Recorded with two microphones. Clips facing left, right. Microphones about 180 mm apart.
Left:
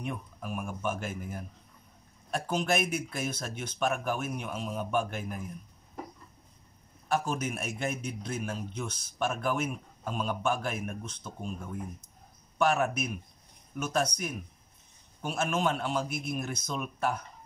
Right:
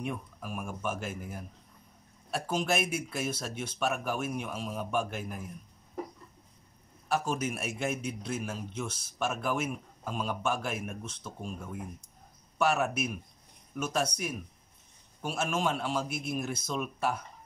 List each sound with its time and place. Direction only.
0.0 s a man's voice: 5° right (ahead or behind)
7.1 s a man's voice: 5° right (ahead or behind)
12.5 s a man's voice: 5° right (ahead or behind)
15.2 s a man's voice: 5° right (ahead or behind)